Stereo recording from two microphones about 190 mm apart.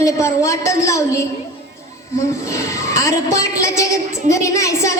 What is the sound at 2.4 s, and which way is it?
A woman's voice, 15° left (ahead or behind).